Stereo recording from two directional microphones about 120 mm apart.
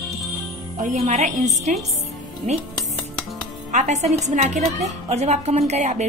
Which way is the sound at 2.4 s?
70° right (ahead or behind).